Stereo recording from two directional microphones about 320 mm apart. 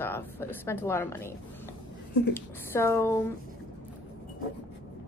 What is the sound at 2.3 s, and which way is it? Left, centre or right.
Speech, centre.